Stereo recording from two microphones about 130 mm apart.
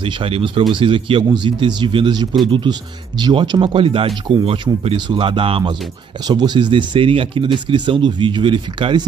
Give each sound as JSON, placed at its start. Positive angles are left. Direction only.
{"t": 0.0, "sound": "speech", "side_deg": -45}